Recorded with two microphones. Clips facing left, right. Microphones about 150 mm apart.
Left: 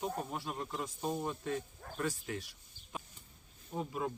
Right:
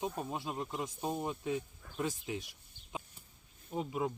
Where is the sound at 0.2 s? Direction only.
20° right (ahead or behind).